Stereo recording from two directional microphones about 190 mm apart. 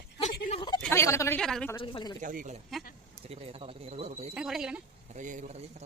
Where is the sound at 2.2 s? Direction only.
45° right (ahead or behind).